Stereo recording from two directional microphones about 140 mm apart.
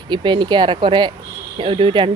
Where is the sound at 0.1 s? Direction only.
35° right (ahead or behind).